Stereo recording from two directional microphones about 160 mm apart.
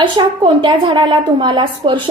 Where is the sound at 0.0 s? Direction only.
30° right (ahead or behind).